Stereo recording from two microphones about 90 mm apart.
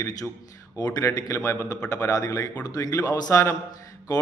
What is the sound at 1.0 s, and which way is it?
Speech, 35° left (ahead or behind).